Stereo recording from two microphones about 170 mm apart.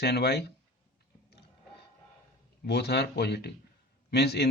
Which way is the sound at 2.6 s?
75° left (ahead or behind).